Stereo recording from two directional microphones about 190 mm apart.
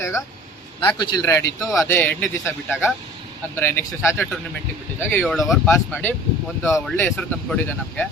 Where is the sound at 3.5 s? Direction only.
10° left (ahead or behind).